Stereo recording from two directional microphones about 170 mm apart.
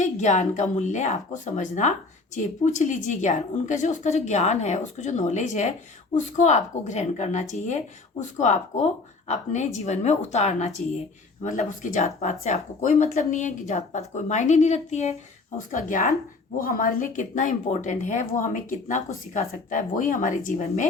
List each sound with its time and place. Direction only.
0.0 s speech: 45° left (ahead or behind)